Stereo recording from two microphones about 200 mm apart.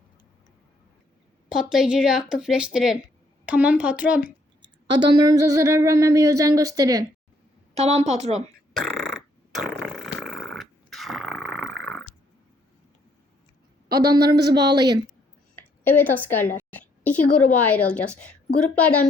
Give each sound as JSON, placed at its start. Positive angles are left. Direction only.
{"t": 1.5, "sound": "speech", "side_deg": -5}
{"t": 4.6, "sound": "speech", "side_deg": -20}
{"t": 7.8, "sound": "a woman's voice", "side_deg": -35}
{"t": 8.8, "sound": "a sound", "side_deg": 0}
{"t": 13.9, "sound": "a woman's voice", "side_deg": -20}
{"t": 15.5, "sound": "a woman's voice", "side_deg": 10}